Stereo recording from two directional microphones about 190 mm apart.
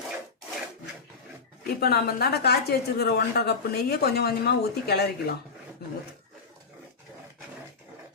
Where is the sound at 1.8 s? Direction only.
55° left (ahead or behind).